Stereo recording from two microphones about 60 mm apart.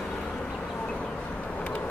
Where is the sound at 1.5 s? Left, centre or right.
Left.